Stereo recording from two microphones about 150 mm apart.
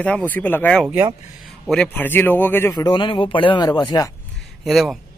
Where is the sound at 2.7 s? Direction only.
30° left (ahead or behind).